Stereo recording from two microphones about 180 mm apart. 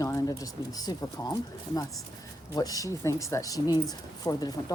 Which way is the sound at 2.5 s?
20° left (ahead or behind).